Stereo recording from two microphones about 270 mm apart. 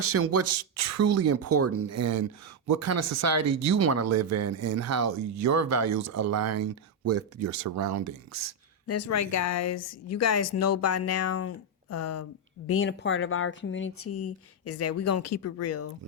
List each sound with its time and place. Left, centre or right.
0.0 s speech: right
2.6 s speech: right
8.9 s speech: left
12.6 s speech: left